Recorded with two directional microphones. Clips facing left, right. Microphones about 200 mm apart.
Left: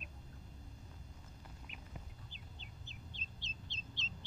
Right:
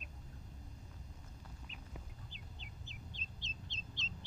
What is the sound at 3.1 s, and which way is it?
Bird, 40° right (ahead or behind).